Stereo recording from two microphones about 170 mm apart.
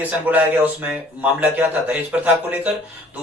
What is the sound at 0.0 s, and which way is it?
A man's voice, 10° right (ahead or behind).